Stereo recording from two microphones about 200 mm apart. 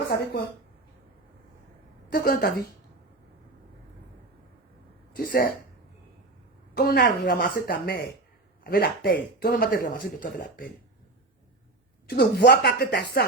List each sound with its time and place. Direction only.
2.1 s speech: 50° left (ahead or behind)
5.1 s speech: 45° left (ahead or behind)
6.7 s speech: 50° left (ahead or behind)
12.0 s speech: 55° left (ahead or behind)